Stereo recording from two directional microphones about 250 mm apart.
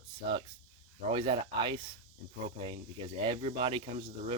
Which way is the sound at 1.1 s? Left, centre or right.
Centre.